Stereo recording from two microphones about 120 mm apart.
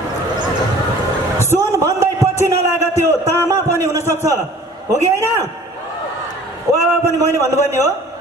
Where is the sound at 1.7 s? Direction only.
25° right (ahead or behind).